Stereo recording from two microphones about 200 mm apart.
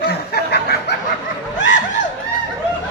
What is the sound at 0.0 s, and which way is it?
Snicker, 50° left (ahead or behind).